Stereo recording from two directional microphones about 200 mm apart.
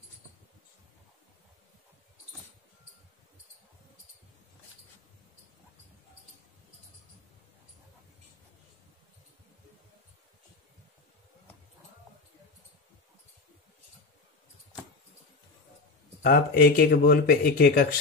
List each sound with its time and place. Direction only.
16.2 s speech: 50° left (ahead or behind)